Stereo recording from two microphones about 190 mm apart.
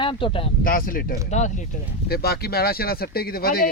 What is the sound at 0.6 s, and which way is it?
Speech, 50° left (ahead or behind).